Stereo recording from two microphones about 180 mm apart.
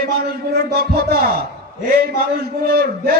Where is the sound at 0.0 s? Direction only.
60° right (ahead or behind).